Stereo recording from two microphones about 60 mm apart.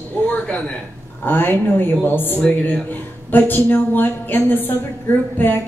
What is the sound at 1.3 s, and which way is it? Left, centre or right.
A woman's voice, left.